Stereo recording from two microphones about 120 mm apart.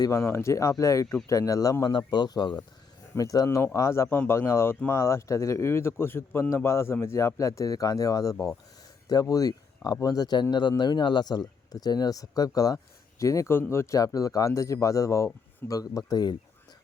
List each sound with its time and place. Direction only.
0.3 s speech: 20° left (ahead or behind)